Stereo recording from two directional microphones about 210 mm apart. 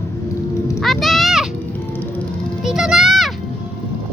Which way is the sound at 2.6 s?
Centre (ahead or behind).